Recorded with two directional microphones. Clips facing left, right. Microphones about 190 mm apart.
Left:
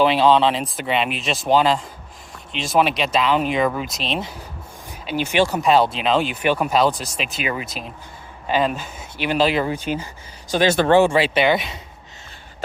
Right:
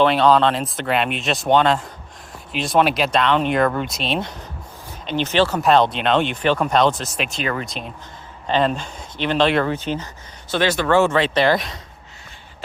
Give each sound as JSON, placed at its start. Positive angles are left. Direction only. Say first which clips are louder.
{"t": 0.0, "sound": "speech", "louder": "even", "side_deg": 0}
{"t": 10.7, "sound": "speech", "louder": "left 3 dB", "side_deg": 25}
{"t": 11.0, "sound": "speech", "louder": "even", "side_deg": 10}